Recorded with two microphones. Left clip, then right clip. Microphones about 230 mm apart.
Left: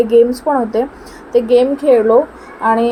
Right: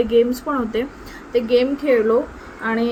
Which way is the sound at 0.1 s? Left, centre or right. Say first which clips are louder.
Left 6 dB; left.